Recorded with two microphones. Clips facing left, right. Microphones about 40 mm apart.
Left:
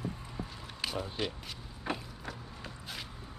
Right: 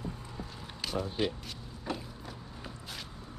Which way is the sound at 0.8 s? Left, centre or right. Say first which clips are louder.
Right 2 dB; centre.